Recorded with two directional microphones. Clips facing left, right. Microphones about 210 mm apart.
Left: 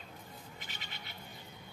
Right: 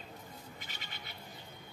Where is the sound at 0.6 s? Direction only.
45° right (ahead or behind).